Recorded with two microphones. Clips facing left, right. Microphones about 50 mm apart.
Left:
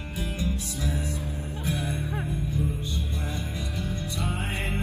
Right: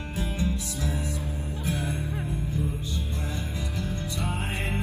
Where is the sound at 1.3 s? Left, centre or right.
Left.